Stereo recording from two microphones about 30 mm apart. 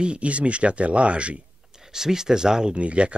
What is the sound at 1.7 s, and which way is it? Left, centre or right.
Speech, centre.